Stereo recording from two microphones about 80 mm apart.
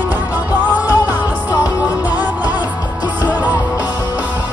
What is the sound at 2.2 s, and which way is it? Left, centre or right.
Music, right.